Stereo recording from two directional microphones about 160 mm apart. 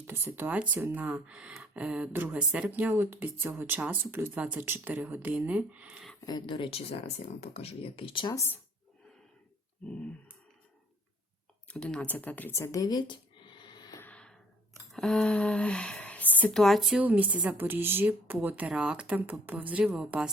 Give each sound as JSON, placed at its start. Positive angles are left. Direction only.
{"t": 0.1, "sound": "speech", "side_deg": -15}
{"t": 6.2, "sound": "speech", "side_deg": 30}
{"t": 11.7, "sound": "speech", "side_deg": 5}
{"t": 14.0, "sound": "gasp", "side_deg": 5}
{"t": 14.9, "sound": "speech", "side_deg": 5}